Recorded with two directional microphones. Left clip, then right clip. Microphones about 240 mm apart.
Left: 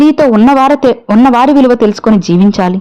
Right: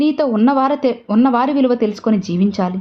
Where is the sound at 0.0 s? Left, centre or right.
Left.